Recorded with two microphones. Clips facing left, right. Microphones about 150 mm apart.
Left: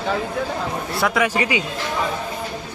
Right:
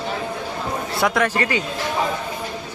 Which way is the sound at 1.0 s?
Centre (ahead or behind).